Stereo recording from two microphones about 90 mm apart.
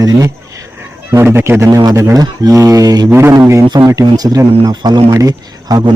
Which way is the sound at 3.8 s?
45° right (ahead or behind).